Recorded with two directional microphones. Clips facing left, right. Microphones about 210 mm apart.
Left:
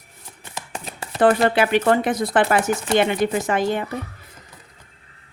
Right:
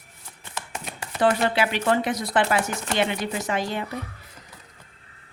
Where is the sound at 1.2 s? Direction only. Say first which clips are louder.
Left 5 dB; 55° left (ahead or behind).